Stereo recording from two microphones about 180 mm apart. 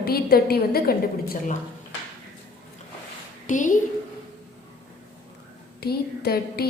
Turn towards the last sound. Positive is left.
turn(degrees=60)  # may be behind; listen again after turning